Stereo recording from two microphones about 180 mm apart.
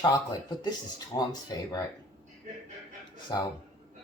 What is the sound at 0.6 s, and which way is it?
Speech, 20° left (ahead or behind).